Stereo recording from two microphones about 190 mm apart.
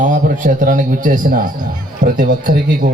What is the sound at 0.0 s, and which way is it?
Speech, 45° right (ahead or behind).